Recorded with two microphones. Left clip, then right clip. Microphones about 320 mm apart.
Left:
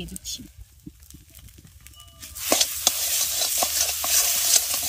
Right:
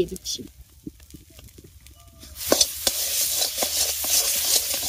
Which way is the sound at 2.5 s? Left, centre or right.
Centre.